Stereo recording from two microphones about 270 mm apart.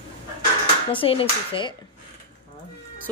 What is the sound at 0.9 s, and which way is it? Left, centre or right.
Speech, centre.